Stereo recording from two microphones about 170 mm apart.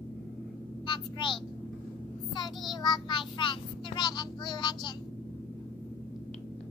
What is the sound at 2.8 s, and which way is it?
A child's voice, 25° left (ahead or behind).